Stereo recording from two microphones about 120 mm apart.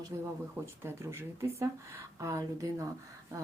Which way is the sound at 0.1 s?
25° right (ahead or behind).